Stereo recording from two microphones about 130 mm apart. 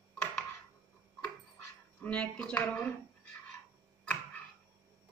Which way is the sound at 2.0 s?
10° left (ahead or behind).